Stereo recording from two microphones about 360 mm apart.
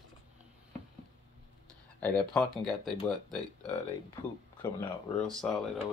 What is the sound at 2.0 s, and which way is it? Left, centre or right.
Speech, centre.